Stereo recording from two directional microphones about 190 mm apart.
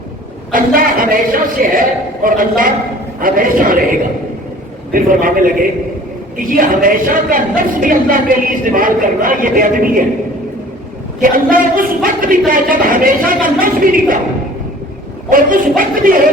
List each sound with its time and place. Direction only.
0.5 s a woman's voice: 50° right (ahead or behind)
4.9 s a woman's voice: 45° right (ahead or behind)
11.2 s a woman's voice: 45° right (ahead or behind)
15.3 s a woman's voice: 45° right (ahead or behind)